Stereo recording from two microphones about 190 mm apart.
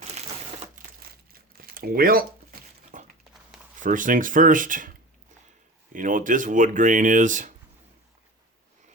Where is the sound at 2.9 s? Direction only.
45° right (ahead or behind).